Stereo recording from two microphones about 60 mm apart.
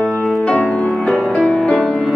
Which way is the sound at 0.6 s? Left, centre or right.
Left.